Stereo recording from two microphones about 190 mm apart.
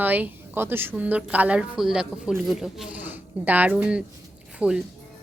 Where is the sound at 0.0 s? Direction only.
10° right (ahead or behind).